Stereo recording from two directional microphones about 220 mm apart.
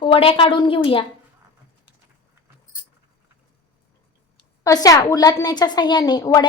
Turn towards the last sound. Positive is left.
turn(degrees=15)  # may be behind; listen again after turning